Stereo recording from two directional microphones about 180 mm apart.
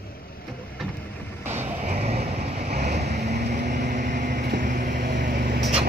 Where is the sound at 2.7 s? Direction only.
65° right (ahead or behind).